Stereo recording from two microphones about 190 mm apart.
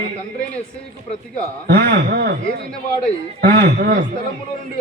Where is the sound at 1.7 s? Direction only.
55° right (ahead or behind).